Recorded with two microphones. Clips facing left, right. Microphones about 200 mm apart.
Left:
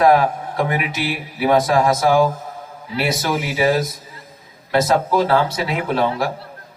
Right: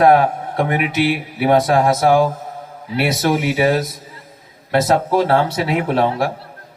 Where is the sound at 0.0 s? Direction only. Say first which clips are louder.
Right 2 dB; 55° right (ahead or behind).